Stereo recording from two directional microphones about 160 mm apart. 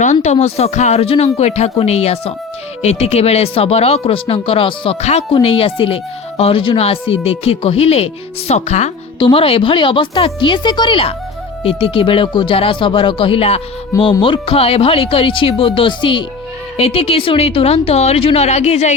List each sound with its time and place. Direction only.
0.0 s speech: 50° left (ahead or behind)
9.1 s speech: 35° left (ahead or behind)